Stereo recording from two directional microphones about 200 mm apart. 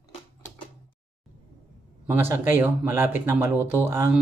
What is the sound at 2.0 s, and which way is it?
Speech, 10° right (ahead or behind).